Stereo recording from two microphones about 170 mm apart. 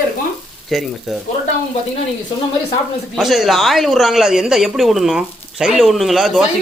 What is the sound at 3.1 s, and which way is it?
Speech, centre (ahead or behind).